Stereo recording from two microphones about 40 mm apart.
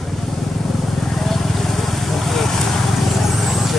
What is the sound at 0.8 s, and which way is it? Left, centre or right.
Vehicle, centre.